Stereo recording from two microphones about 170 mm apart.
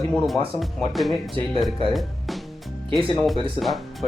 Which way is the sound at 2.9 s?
30° right (ahead or behind).